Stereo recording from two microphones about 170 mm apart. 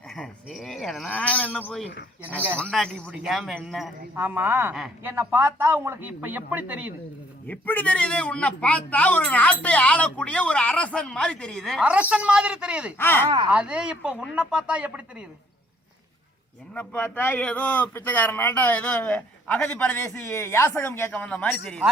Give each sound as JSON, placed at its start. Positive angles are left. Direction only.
{"t": 0.2, "sound": "speech", "side_deg": 0}
{"t": 4.1, "sound": "a man's voice", "side_deg": -10}
{"t": 7.4, "sound": "a man's voice", "side_deg": 10}
{"t": 13.0, "sound": "a man's voice", "side_deg": 10}
{"t": 13.5, "sound": "speech", "side_deg": -5}
{"t": 16.7, "sound": "a man's voice", "side_deg": 10}